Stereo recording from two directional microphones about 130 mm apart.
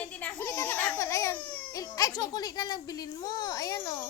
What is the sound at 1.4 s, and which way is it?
Baby cry, 10° left (ahead or behind).